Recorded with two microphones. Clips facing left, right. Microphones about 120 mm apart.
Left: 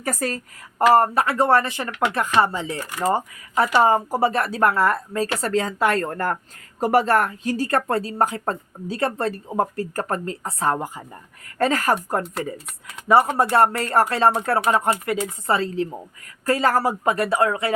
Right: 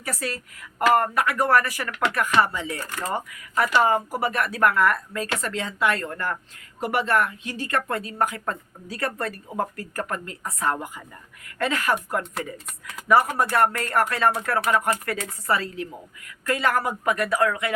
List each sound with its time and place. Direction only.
0.0 s a woman's voice: 45° left (ahead or behind)
0.9 s speech: 30° left (ahead or behind)